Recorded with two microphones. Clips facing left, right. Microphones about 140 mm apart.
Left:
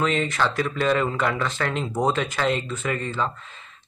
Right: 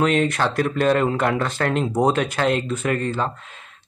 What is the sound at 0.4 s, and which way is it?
A man's voice, 45° right (ahead or behind).